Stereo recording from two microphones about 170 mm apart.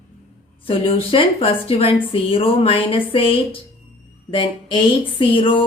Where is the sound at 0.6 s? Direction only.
30° left (ahead or behind).